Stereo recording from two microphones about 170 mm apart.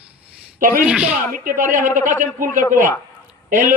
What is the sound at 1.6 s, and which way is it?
A man's voice, 50° right (ahead or behind).